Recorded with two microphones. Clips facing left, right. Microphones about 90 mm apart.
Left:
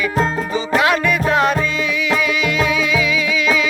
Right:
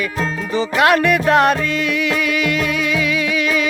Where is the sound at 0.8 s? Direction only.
55° right (ahead or behind).